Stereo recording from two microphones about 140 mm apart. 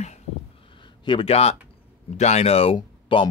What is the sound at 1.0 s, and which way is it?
Speech, 40° left (ahead or behind).